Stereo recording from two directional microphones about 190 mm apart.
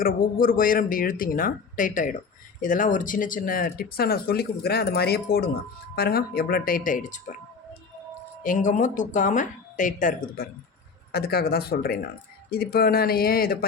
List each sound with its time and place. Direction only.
0.0 s speech: 50° left (ahead or behind)
8.4 s speech: 40° left (ahead or behind)